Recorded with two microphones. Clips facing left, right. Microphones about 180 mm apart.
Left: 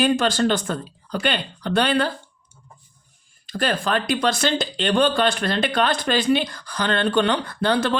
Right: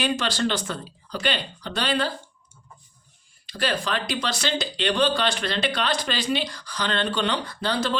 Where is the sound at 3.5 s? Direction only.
50° left (ahead or behind).